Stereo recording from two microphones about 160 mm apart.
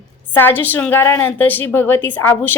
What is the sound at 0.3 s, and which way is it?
A woman's voice, 10° left (ahead or behind).